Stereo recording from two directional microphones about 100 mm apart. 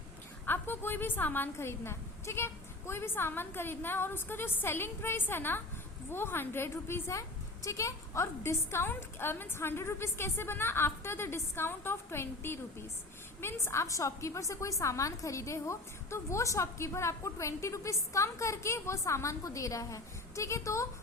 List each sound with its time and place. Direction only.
0.4 s a woman's voice: 20° left (ahead or behind)